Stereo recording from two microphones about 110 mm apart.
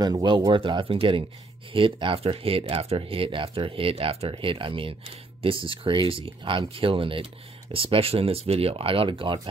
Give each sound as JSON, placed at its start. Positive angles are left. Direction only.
{"t": 0.0, "sound": "speech", "side_deg": -40}